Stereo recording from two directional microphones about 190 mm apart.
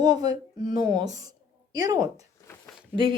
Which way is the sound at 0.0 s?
20° right (ahead or behind).